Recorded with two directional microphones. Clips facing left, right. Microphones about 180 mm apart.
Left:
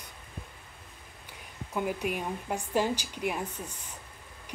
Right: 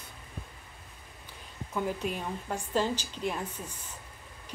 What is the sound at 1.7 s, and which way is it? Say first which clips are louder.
A woman's voice: left 1 dB; 15° left (ahead or behind).